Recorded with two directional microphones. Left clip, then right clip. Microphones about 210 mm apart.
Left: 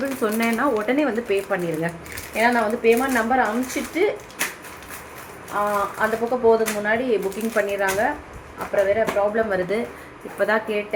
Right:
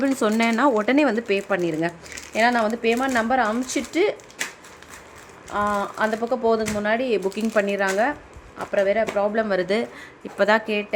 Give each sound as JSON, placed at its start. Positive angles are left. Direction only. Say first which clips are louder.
{"t": 0.2, "sound": "speech", "louder": "even", "side_deg": -65}
{"t": 5.5, "sound": "speech", "louder": "left 1 dB", "side_deg": -55}